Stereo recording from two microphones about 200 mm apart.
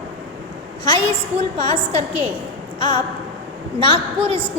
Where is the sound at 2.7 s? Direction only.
25° left (ahead or behind).